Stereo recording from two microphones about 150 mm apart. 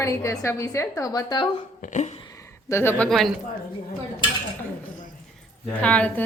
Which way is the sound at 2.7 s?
15° left (ahead or behind).